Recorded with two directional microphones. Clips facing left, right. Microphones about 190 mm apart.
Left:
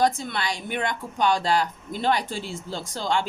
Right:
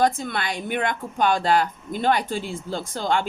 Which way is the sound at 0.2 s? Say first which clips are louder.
Right 2 dB; 50° right (ahead or behind).